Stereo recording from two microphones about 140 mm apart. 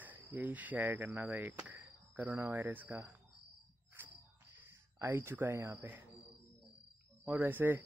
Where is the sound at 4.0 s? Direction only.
15° right (ahead or behind).